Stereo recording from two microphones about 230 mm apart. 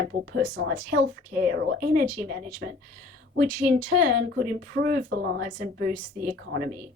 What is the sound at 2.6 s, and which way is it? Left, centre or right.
Speech, right.